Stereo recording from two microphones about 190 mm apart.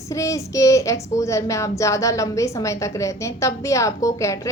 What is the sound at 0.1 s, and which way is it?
A woman's voice, 15° left (ahead or behind).